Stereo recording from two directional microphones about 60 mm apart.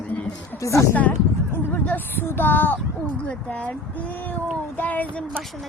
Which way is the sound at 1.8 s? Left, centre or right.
Left.